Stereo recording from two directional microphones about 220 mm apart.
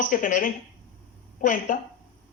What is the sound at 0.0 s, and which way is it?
Speech, 35° left (ahead or behind).